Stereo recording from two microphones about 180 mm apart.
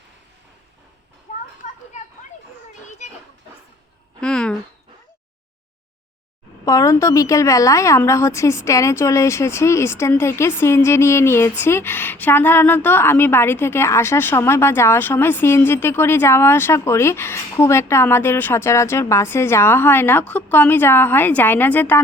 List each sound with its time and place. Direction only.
1.9 s children playing: 40° left (ahead or behind)
4.2 s a sound: 5° left (ahead or behind)
6.7 s a woman's voice: 20° left (ahead or behind)